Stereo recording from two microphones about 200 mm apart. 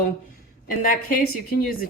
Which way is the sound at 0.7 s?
45° left (ahead or behind).